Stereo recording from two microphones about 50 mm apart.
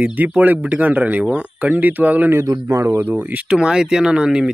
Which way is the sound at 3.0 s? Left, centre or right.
Right.